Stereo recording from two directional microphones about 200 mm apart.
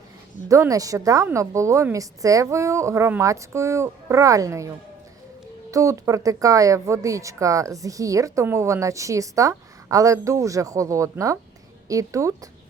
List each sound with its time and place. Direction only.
0.4 s speech: 15° right (ahead or behind)
5.7 s speech: 15° right (ahead or behind)